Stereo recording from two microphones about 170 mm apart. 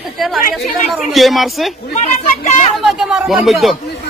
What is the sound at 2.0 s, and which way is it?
Speech, 45° left (ahead or behind).